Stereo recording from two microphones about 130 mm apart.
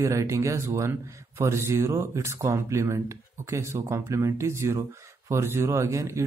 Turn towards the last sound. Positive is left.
turn(degrees=-20)  # may be behind; listen again after turning